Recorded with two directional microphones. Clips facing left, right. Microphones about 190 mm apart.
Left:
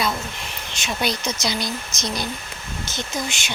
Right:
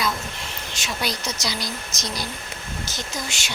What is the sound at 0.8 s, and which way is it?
Speech, 25° left (ahead or behind).